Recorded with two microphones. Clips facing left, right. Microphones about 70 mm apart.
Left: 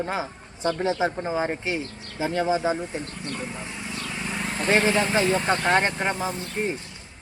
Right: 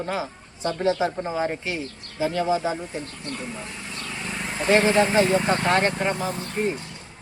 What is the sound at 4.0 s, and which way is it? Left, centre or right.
Vehicle, centre.